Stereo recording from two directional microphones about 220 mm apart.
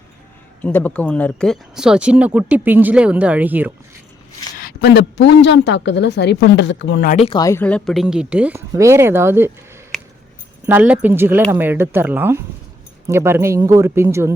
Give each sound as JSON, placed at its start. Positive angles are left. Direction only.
{"t": 0.6, "sound": "speech", "side_deg": 10}
{"t": 4.5, "sound": "a woman's voice", "side_deg": 45}
{"t": 7.1, "sound": "speech", "side_deg": 25}
{"t": 10.7, "sound": "speech", "side_deg": -5}